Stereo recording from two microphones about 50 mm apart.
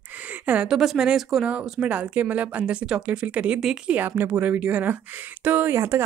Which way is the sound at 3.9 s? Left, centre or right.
Right.